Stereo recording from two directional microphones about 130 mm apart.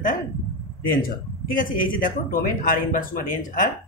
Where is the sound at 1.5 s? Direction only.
90° left.